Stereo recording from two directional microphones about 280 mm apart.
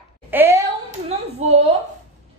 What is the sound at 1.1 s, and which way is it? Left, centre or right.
Speech, right.